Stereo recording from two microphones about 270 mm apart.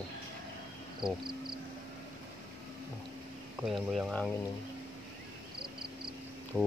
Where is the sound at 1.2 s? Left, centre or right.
Right.